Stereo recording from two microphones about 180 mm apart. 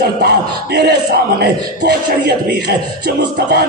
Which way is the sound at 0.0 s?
65° right (ahead or behind).